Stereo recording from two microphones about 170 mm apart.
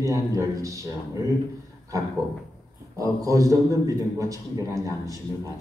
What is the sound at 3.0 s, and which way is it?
A man's voice, 20° right (ahead or behind).